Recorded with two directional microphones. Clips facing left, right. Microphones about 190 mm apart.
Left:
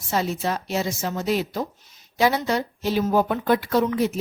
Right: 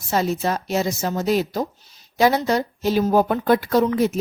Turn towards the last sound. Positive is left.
turn(degrees=-40)  # may be behind; listen again after turning